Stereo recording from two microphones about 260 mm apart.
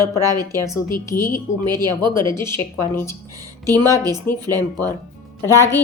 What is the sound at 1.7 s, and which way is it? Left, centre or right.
Speech, centre.